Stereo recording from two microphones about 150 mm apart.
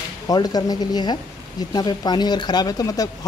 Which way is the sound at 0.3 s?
25° left (ahead or behind).